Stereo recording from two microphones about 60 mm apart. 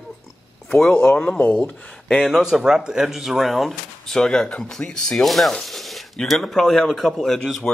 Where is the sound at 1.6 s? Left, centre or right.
Centre.